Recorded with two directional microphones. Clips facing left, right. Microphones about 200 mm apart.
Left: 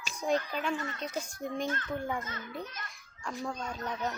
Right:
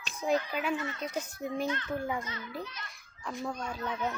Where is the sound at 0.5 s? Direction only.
5° right (ahead or behind).